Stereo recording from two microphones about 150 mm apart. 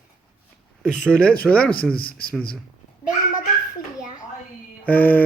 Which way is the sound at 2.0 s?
80° left.